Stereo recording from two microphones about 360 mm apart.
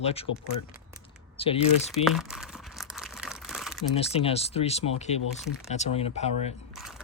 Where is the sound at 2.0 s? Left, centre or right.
Centre.